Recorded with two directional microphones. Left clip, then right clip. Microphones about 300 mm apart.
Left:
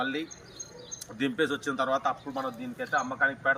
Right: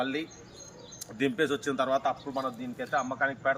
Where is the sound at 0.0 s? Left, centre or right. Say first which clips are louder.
Even; centre.